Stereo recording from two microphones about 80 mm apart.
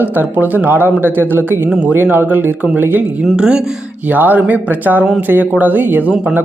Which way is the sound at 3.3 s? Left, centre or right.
Centre.